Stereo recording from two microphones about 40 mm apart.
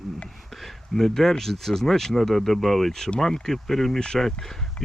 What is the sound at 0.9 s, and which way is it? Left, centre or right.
Speech, centre.